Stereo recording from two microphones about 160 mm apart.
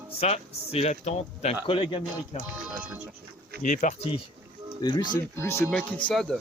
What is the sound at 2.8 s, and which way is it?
Speech, 10° right (ahead or behind).